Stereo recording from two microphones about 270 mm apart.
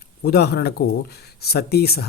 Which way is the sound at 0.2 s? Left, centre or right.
Left.